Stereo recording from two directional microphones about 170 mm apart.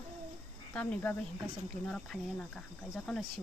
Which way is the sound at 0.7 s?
5° left (ahead or behind).